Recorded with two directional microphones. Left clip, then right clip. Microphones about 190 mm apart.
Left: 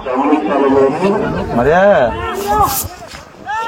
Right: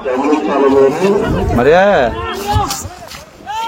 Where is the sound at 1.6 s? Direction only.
20° left (ahead or behind).